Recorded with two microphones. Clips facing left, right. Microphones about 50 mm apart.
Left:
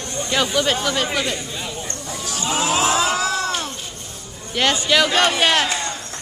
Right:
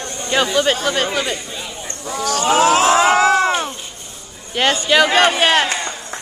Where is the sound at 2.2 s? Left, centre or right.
Right.